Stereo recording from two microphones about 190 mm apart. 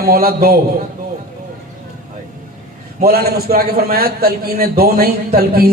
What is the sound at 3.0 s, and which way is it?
A man's voice, 55° right (ahead or behind).